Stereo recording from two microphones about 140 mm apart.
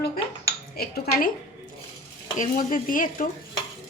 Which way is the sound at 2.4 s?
80° left.